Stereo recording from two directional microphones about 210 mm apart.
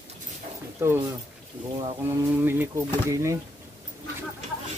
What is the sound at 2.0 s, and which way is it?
Speech, 10° right (ahead or behind).